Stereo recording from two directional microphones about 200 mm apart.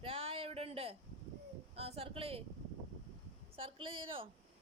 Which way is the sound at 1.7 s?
30° right (ahead or behind).